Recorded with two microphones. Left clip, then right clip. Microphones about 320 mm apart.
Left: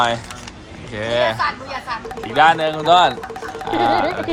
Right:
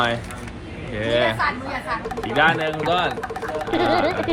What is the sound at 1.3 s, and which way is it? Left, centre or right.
Speech, left.